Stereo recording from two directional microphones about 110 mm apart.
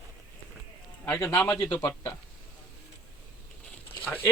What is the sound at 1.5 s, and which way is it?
Speech, 30° left (ahead or behind).